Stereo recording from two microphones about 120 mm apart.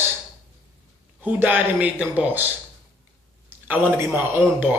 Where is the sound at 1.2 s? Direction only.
15° right (ahead or behind).